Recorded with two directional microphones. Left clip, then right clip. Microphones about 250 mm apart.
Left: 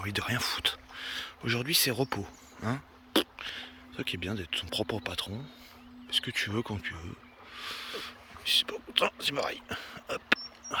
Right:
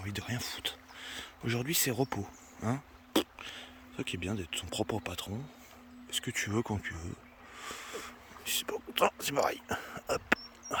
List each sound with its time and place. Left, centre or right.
0.0 s speech: centre